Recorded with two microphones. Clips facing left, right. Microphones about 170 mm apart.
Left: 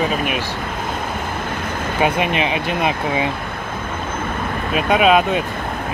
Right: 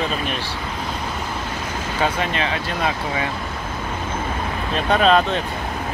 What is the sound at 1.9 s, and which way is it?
Speech, 15° left (ahead or behind).